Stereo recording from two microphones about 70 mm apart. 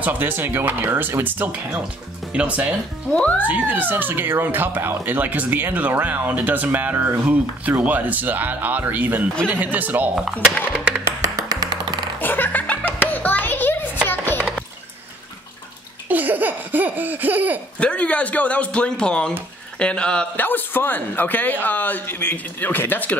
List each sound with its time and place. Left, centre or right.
0.0 s speech: right
3.1 s speech: centre
3.4 s speech: right
10.7 s music: centre
11.1 s music: right
12.2 s music: left
14.0 s a sound: left
16.1 s laughter: right
17.7 s speech: centre
20.3 s speech: left